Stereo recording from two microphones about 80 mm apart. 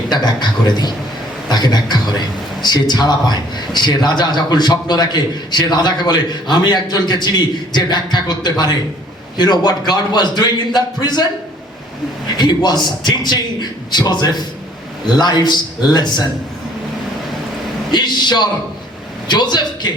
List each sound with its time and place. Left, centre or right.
0.1 s a man's voice: left
12.4 s a man's voice: left
17.9 s a man's voice: left